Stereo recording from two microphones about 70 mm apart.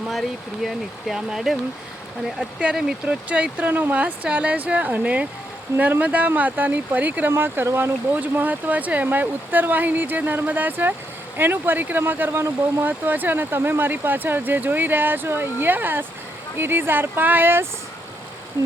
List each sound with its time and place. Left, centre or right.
0.1 s speech: centre
2.6 s speech: centre; by 12.9 s right
12.9 s speech: right